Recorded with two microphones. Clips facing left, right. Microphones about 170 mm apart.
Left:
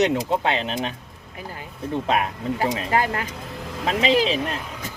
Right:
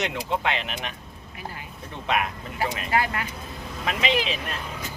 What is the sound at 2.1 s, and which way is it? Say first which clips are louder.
Speech: left 2 dB; 35° left (ahead or behind).